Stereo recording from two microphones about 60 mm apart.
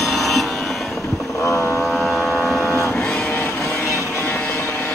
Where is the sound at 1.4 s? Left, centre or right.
Left.